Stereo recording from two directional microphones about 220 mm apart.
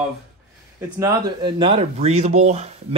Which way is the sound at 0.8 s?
15° right (ahead or behind).